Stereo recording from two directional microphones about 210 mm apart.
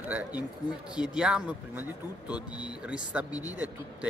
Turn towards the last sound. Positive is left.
turn(degrees=-5)  # may be behind; listen again after turning